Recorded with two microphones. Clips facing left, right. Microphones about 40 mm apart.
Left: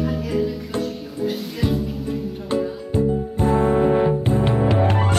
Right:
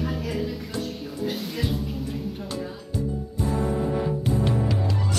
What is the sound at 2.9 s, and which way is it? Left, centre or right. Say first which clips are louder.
Music: left 9 dB; left.